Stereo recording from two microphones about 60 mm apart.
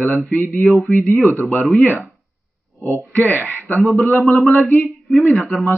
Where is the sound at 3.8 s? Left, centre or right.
Centre.